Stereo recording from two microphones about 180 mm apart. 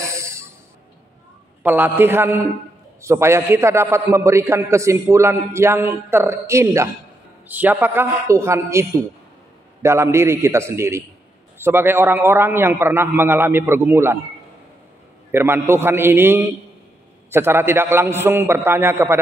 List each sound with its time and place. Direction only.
0.0 s a sound: 15° right (ahead or behind)
1.6 s a man's voice: 10° right (ahead or behind)
15.3 s a man's voice: 15° right (ahead or behind)